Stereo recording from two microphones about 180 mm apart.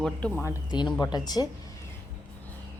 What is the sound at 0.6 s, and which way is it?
Speech, 25° left (ahead or behind).